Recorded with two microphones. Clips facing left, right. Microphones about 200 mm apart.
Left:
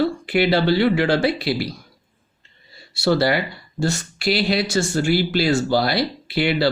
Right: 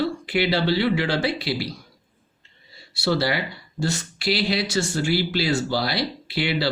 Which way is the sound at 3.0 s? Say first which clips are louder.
Left 5 dB; 50° left (ahead or behind).